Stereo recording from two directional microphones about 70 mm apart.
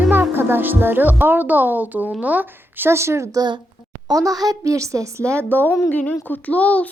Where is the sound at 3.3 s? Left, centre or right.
Right.